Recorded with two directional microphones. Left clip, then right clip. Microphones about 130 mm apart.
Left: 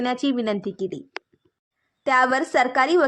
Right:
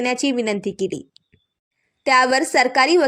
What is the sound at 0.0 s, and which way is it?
A woman's voice, 15° right (ahead or behind).